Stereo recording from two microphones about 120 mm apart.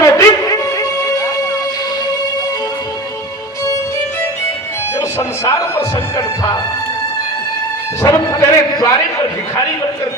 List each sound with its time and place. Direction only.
0.0 s music: 25° left (ahead or behind)
4.9 s speech: 25° left (ahead or behind)
8.0 s a man's voice: 30° left (ahead or behind)